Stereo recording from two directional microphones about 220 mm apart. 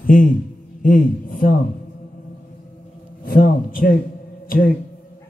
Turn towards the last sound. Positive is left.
turn(degrees=40)  # may be behind; listen again after turning